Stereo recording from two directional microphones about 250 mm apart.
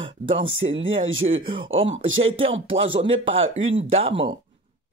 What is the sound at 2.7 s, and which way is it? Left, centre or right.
Speech, right.